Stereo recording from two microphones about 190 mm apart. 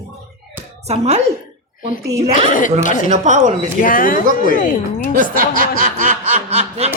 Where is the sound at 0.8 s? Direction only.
35° right (ahead or behind).